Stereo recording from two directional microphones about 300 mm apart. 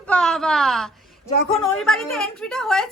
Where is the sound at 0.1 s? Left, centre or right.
Centre.